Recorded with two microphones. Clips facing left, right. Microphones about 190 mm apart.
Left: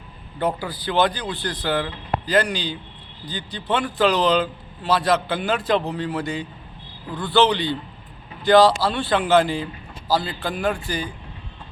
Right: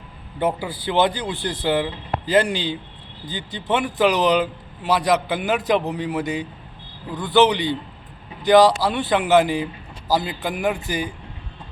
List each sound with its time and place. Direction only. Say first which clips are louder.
0.3 s a man's voice: right 1 dB; 20° right (ahead or behind)